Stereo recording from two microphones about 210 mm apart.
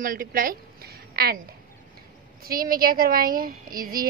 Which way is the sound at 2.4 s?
45° right (ahead or behind).